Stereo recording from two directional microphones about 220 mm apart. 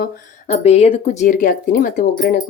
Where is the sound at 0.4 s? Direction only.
30° left (ahead or behind).